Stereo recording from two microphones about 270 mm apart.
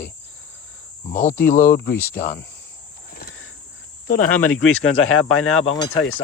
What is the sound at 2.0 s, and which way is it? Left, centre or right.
Speech, centre.